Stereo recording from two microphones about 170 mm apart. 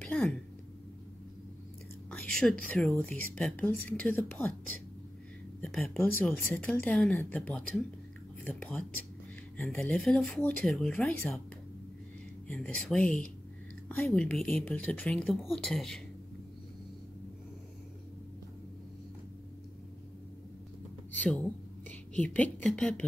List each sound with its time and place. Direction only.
0.0 s a sound: 5° left (ahead or behind)
2.0 s a woman's voice: 5° left (ahead or behind)
5.6 s a woman's voice: 5° left (ahead or behind)
9.6 s speech: 5° left (ahead or behind)
12.4 s a woman's voice: 5° left (ahead or behind)
21.2 s a woman's voice: 10° left (ahead or behind)